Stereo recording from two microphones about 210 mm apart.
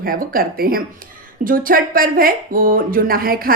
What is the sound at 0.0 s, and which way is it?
Speech, 45° right (ahead or behind).